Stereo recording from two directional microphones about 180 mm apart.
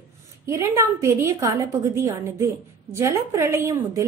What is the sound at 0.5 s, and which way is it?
A woman's voice, 15° right (ahead or behind).